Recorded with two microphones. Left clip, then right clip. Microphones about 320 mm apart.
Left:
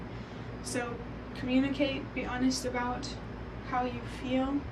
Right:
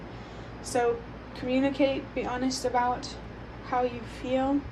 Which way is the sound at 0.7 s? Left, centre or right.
Centre.